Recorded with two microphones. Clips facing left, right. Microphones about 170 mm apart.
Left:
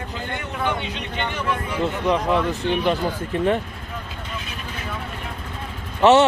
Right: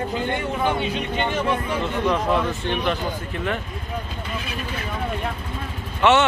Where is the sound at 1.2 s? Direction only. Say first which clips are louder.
Right 2 dB; 25° right (ahead or behind).